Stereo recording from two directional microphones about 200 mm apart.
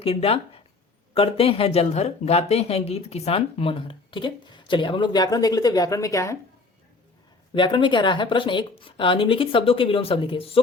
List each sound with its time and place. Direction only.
0.0 s speech: 30° left (ahead or behind)
7.5 s speech: 25° left (ahead or behind)